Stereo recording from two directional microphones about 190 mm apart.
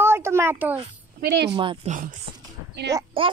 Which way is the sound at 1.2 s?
60° right (ahead or behind).